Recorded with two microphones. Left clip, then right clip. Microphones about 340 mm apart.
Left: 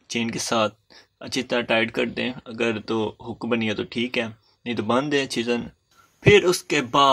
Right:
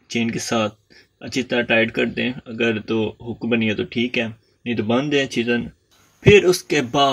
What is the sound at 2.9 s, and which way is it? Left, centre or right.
Speech, left.